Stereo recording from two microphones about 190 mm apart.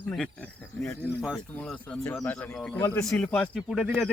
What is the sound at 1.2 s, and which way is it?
Speech, centre (ahead or behind).